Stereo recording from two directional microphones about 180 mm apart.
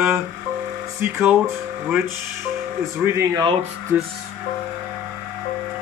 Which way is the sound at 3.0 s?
15° right (ahead or behind).